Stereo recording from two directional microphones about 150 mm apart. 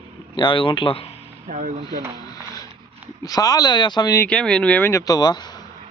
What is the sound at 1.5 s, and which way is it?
Speech, 50° right (ahead or behind).